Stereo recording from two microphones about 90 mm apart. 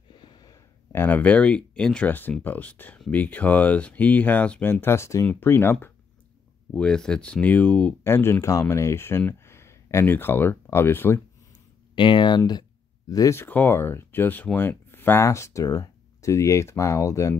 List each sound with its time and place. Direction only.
0.1 s a sound: 55° left (ahead or behind)
0.9 s speech: 20° left (ahead or behind)
5.2 s speech: 15° left (ahead or behind)
6.7 s speech: 10° left (ahead or behind)
8.0 s speech: 30° left (ahead or behind)
11.9 s speech: 65° left (ahead or behind)
12.4 s speech: 50° left (ahead or behind)
13.3 s speech: 20° left (ahead or behind)